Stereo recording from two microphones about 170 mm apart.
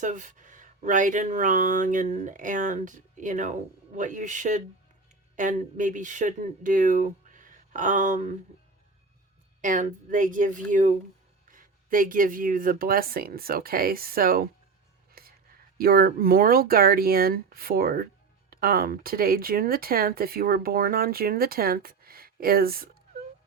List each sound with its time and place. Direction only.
0.0 s speech: 45° right (ahead or behind)
9.6 s speech: 50° right (ahead or behind)
15.2 s a sound: 60° right (ahead or behind)
15.8 s speech: 60° right (ahead or behind)